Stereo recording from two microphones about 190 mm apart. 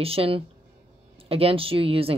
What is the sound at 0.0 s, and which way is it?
A woman's voice, 30° right (ahead or behind).